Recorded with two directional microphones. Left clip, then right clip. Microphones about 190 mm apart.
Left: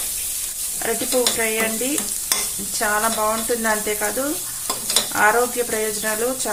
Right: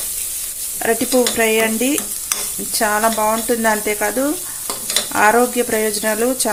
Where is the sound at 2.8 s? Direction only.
40° right (ahead or behind).